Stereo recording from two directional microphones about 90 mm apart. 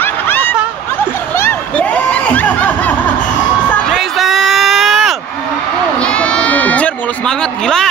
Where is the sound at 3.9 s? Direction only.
Centre (ahead or behind).